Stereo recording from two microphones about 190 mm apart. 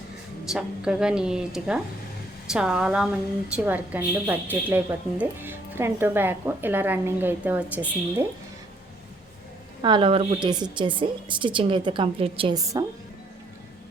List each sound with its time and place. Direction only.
0.5 s a woman's voice: 5° right (ahead or behind)
9.8 s a woman's voice: 25° right (ahead or behind)